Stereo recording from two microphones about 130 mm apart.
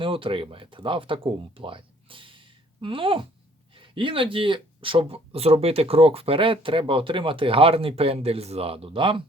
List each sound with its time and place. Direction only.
0.0 s speech: 40° right (ahead or behind)